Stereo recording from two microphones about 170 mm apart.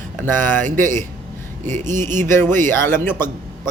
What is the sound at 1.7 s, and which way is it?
Speech, 45° right (ahead or behind).